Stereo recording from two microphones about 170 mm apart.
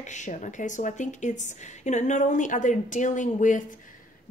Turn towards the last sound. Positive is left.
turn(degrees=50)  # may be behind; listen again after turning